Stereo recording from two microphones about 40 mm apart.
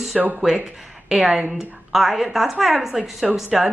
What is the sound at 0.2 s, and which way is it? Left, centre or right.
A woman's voice, centre.